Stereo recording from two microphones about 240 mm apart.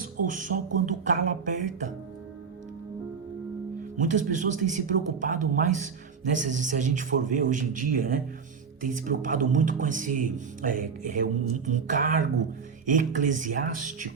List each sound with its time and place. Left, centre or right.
0.2 s speech: right
3.9 s speech: right